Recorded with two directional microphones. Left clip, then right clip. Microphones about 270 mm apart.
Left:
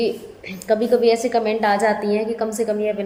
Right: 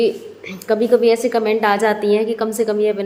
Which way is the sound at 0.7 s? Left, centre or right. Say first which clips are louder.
Right 2 dB; centre.